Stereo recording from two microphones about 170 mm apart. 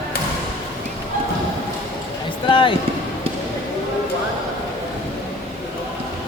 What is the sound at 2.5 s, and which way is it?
Music, 30° left (ahead or behind).